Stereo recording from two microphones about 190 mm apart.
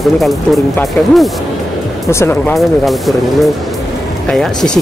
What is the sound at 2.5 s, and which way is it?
Speech, centre (ahead or behind).